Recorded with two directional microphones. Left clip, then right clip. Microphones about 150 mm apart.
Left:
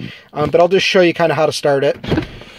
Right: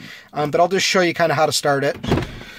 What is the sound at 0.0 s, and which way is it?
Speech, 5° left (ahead or behind).